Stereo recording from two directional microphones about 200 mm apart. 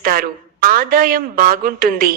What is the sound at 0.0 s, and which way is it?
A woman's voice, 45° right (ahead or behind).